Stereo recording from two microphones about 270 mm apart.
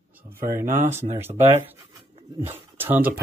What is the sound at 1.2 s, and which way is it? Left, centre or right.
Speech, centre.